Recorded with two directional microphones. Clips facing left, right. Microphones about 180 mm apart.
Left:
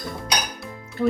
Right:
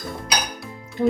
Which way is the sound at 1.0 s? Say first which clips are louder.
Right 1 dB; 15° right (ahead or behind).